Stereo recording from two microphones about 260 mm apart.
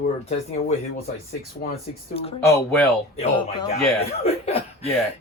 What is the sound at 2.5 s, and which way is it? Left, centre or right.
Speech, centre.